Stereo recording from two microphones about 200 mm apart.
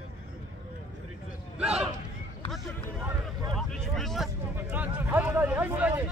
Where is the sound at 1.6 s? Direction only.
5° right (ahead or behind).